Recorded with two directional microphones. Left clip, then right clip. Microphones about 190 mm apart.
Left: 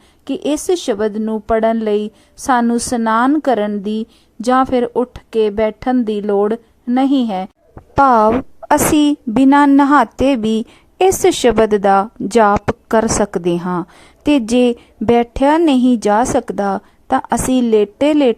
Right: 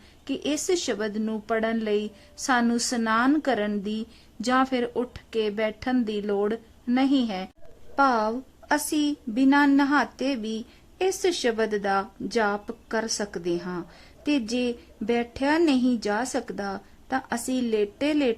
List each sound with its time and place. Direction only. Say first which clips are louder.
0.3 s a woman's voice: left 9 dB; 30° left (ahead or behind)